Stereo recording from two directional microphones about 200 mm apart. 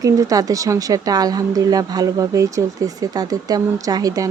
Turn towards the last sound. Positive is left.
turn(degrees=-15)  # may be behind; listen again after turning